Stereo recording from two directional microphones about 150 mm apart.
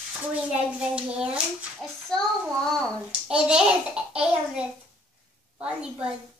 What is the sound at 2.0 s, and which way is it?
A child's voice, 5° left (ahead or behind).